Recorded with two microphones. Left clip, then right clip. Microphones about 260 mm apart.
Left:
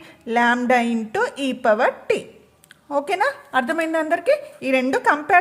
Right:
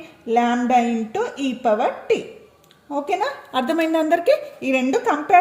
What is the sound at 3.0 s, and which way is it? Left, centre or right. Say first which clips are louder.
A woman's voice: right 1 dB; left.